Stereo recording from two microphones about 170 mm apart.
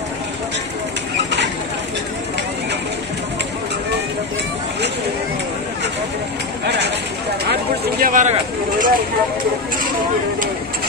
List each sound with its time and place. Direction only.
8.0 s speech: 50° right (ahead or behind)